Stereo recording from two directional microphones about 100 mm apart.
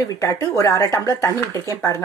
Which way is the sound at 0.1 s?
35° left (ahead or behind).